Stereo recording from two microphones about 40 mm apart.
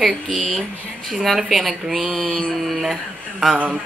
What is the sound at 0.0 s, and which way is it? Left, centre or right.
Speech, centre.